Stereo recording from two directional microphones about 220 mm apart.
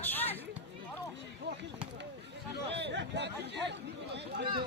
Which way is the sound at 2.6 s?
50° right (ahead or behind).